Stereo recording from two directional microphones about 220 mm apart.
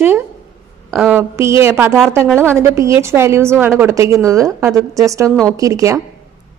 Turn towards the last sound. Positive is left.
turn(degrees=-15)  # may be behind; listen again after turning